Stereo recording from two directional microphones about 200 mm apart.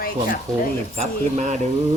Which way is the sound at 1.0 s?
35° right (ahead or behind).